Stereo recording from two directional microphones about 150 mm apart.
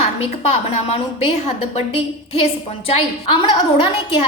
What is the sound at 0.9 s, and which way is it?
A woman's voice, 45° left (ahead or behind).